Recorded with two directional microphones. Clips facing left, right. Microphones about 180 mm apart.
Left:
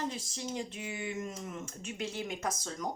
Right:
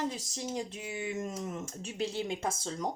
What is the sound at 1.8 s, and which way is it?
Speech, 35° right (ahead or behind).